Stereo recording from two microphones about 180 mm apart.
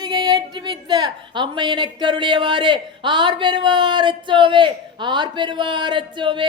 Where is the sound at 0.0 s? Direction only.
20° right (ahead or behind).